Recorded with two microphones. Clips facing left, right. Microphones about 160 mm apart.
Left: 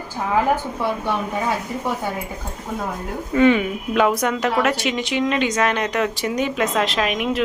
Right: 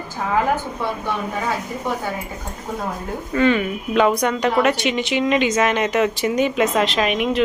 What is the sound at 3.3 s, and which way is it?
Speech, 15° left (ahead or behind).